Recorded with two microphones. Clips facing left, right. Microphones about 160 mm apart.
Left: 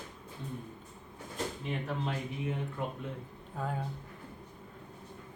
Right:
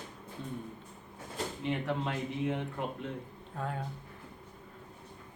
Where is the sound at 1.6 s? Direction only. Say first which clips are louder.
Right 6 dB; 85° right.